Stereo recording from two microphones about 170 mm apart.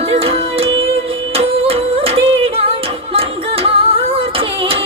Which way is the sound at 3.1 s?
35° right (ahead or behind).